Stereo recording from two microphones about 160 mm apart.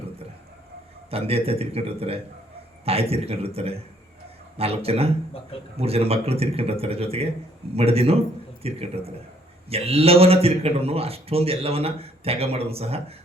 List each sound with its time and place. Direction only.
1.1 s speech: 40° right (ahead or behind)